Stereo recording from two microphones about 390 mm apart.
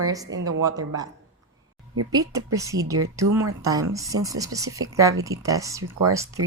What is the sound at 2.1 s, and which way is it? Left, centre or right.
A woman's voice, centre.